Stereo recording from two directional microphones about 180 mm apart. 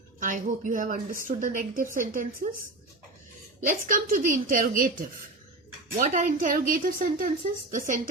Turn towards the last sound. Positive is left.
turn(degrees=-45)  # may be behind; listen again after turning